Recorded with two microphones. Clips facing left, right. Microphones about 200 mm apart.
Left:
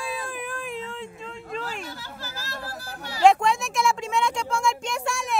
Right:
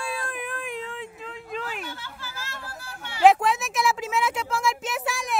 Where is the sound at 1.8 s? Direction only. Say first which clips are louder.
Left 1 dB; 40° left (ahead or behind).